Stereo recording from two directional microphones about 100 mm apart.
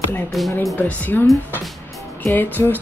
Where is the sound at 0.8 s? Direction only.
15° left (ahead or behind).